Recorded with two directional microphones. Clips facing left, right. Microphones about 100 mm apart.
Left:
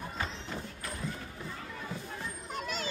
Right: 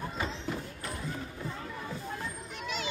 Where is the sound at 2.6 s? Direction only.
40° left (ahead or behind).